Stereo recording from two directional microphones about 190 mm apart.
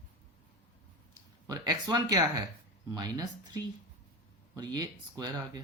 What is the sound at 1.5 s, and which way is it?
Speech, 20° right (ahead or behind).